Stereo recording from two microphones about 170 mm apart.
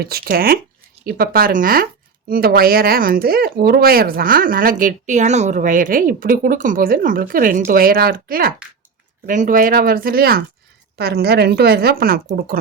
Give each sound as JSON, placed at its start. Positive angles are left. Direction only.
{"t": 0.0, "sound": "speech", "side_deg": -60}
{"t": 9.2, "sound": "a woman's voice", "side_deg": -50}